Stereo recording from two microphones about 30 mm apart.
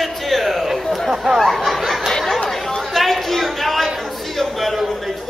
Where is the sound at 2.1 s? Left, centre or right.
Centre.